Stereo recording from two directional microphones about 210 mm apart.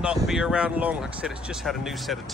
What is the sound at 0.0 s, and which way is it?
Speech, 5° right (ahead or behind).